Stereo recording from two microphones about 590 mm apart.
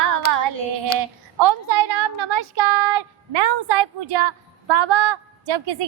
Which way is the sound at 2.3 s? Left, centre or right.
Right.